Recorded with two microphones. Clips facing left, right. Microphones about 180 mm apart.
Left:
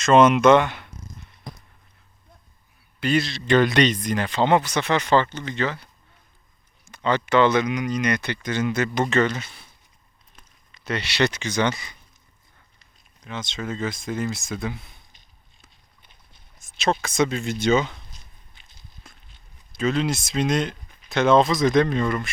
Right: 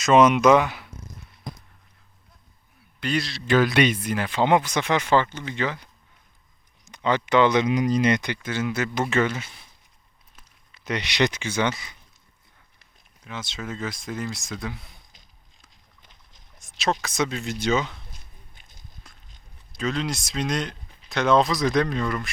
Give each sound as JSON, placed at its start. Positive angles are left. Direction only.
{"t": 0.0, "sound": "speech", "side_deg": 0}
{"t": 3.0, "sound": "speech", "side_deg": 0}
{"t": 6.9, "sound": "speech", "side_deg": -15}
{"t": 7.7, "sound": "speech", "side_deg": -35}
{"t": 8.2, "sound": "speech", "side_deg": -10}
{"t": 13.2, "sound": "speech", "side_deg": -5}
{"t": 16.0, "sound": "boat", "side_deg": -90}
{"t": 16.6, "sound": "speech", "side_deg": 0}
{"t": 18.1, "sound": "a sound", "side_deg": -50}
{"t": 19.1, "sound": "clip-clop", "side_deg": 0}
{"t": 19.7, "sound": "speech", "side_deg": 0}